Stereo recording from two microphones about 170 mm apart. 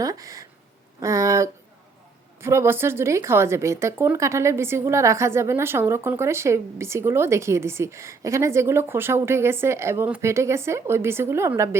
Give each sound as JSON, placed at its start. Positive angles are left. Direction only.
{"t": 0.0, "sound": "speech", "side_deg": -20}